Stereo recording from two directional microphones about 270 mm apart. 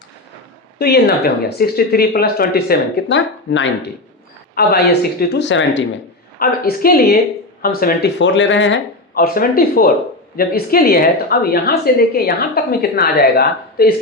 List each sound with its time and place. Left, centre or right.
0.8 s speech: left